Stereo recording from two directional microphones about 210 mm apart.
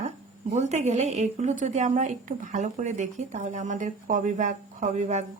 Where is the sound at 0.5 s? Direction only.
35° right (ahead or behind).